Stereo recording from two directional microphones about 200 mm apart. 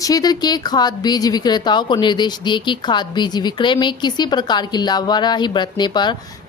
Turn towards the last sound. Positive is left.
turn(degrees=20)  # may be behind; listen again after turning